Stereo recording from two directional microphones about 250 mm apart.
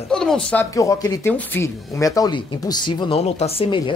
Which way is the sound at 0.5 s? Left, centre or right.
Centre.